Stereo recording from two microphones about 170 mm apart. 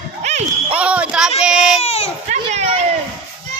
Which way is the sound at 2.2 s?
45° right (ahead or behind).